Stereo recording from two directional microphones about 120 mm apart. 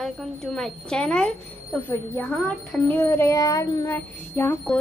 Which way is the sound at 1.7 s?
15° left (ahead or behind).